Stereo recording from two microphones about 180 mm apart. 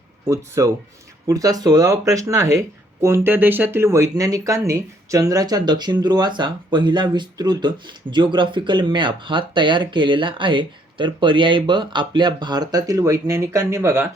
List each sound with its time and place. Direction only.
0.3 s speech: 15° right (ahead or behind)